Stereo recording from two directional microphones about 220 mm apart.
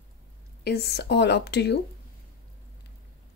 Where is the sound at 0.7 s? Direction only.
50° left (ahead or behind).